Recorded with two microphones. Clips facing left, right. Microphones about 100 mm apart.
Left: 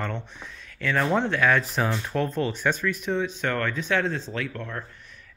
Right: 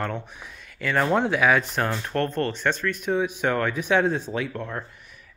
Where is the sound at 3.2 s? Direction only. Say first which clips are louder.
Right 3 dB; 15° right (ahead or behind).